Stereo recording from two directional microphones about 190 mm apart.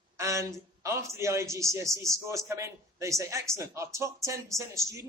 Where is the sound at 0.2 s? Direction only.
15° right (ahead or behind).